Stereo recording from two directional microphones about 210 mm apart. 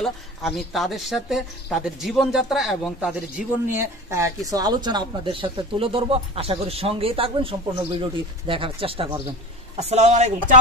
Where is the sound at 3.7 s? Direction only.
15° right (ahead or behind); by 10.6 s 35° right (ahead or behind).